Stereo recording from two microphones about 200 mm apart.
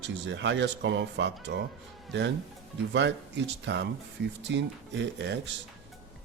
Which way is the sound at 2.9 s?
60° right (ahead or behind).